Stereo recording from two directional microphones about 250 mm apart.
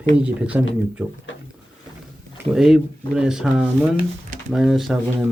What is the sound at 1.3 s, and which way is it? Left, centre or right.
Drawer open or close, left.